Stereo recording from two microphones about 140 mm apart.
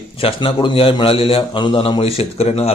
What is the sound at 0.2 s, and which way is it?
A man's voice, 40° left (ahead or behind).